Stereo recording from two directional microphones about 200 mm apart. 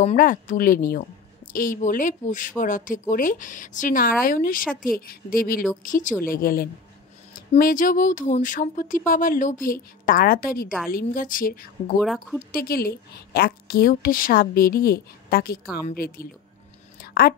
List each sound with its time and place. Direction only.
0.0 s speech: 40° left (ahead or behind)
12.0 s speech: centre (ahead or behind)
12.4 s speech: 45° left (ahead or behind)
17.0 s a sound: 50° left (ahead or behind)